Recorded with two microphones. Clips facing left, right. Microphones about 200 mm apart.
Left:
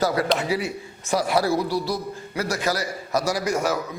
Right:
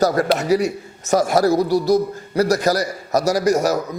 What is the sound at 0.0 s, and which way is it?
A man's voice, 45° right (ahead or behind).